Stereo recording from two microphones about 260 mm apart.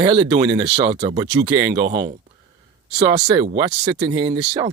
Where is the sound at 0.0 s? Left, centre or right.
Centre.